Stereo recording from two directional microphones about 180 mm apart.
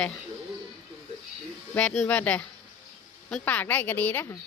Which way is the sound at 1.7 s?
5° left (ahead or behind).